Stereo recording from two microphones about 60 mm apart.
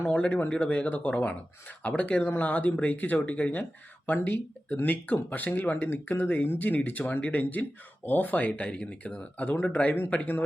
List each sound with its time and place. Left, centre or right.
0.0 s speech: left